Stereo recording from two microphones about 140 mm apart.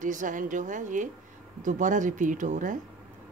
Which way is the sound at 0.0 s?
65° right (ahead or behind).